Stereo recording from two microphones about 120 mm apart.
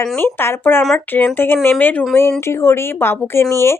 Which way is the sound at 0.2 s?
20° left (ahead or behind).